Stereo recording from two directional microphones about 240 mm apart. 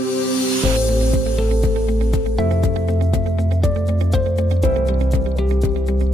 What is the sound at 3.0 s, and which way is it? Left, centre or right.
Music, centre.